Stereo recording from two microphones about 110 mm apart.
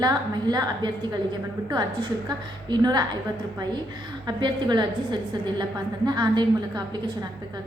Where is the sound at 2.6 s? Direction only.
40° right (ahead or behind).